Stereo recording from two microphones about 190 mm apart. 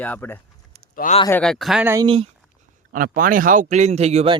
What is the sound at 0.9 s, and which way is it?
Speech, 45° left (ahead or behind).